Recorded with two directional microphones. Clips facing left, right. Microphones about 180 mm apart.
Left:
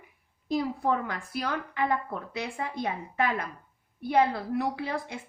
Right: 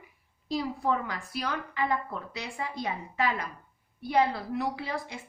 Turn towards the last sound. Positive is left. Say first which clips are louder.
# left 2 dB
turn(degrees=50)  # may be behind; listen again after turning